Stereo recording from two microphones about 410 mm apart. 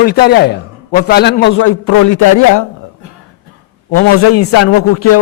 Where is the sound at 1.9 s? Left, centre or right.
Left.